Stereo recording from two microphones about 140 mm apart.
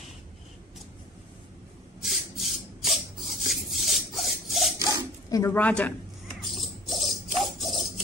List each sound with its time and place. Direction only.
2.0 s filing: centre (ahead or behind)
5.3 s speech: 20° left (ahead or behind)
5.6 s a man's voice: 10° left (ahead or behind)
6.4 s music: centre (ahead or behind)